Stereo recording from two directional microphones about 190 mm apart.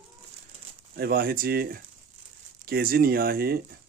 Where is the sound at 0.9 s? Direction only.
55° right (ahead or behind).